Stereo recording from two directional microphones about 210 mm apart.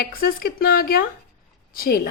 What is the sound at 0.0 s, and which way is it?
A woman's voice, 45° left (ahead or behind).